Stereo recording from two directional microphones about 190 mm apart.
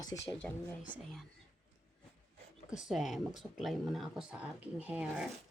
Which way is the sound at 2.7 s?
5° right (ahead or behind).